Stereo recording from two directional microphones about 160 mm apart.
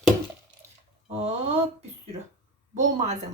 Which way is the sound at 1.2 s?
40° right (ahead or behind).